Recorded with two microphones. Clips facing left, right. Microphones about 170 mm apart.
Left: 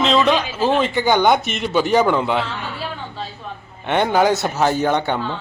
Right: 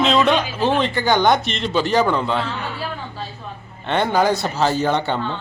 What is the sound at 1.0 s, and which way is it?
A man's voice, 10° left (ahead or behind).